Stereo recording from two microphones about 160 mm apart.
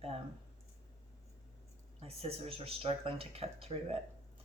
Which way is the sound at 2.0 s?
40° right (ahead or behind).